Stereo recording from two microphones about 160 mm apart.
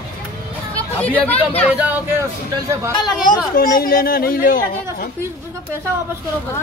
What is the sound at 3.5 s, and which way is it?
A woman's voice, 65° left (ahead or behind).